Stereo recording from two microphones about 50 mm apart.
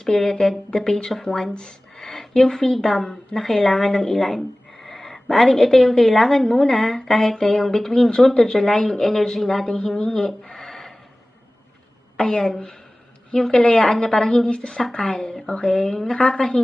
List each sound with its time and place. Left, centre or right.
0.0 s a woman's voice: centre
10.7 s a sound: centre
12.1 s a woman's voice: centre